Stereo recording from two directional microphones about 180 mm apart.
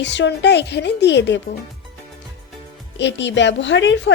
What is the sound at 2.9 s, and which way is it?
A woman's voice, 75° left (ahead or behind).